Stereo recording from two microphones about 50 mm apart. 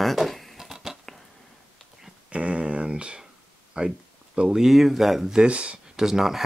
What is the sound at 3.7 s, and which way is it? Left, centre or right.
Speech, right.